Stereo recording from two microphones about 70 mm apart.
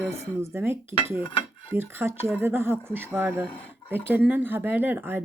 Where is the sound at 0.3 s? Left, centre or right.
Right.